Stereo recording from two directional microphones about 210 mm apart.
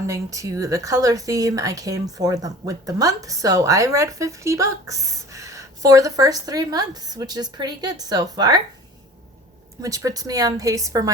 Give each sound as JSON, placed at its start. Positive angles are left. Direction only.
{"t": 0.1, "sound": "speech", "side_deg": -15}
{"t": 9.8, "sound": "speech", "side_deg": -15}